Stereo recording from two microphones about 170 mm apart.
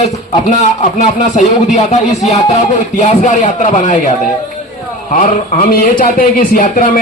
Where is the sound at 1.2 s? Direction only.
45° left (ahead or behind).